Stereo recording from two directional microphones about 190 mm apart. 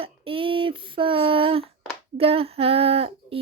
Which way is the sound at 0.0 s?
30° right (ahead or behind).